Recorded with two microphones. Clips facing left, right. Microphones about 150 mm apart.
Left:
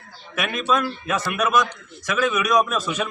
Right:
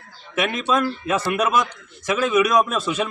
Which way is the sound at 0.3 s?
25° right (ahead or behind).